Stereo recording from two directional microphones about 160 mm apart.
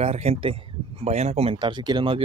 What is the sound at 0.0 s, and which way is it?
Speech, 40° right (ahead or behind).